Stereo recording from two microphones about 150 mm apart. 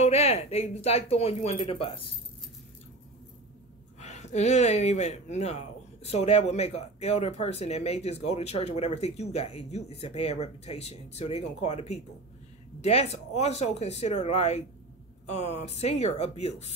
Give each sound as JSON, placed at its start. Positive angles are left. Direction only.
{"t": 0.0, "sound": "speech", "side_deg": 45}
{"t": 4.0, "sound": "speech", "side_deg": 50}